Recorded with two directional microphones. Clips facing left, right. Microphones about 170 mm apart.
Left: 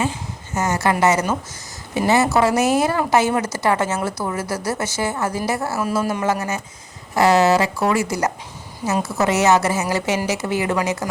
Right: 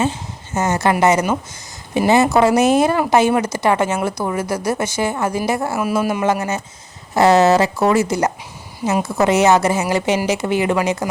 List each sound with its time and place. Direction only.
0.0 s speech: 25° right (ahead or behind)